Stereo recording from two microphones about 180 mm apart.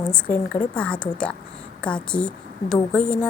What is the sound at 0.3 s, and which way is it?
Speech, 50° left (ahead or behind).